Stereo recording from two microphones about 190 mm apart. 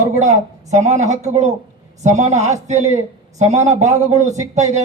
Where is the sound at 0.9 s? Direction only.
40° right (ahead or behind).